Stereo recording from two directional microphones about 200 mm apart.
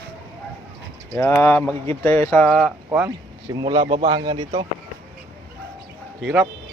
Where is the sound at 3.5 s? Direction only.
25° right (ahead or behind).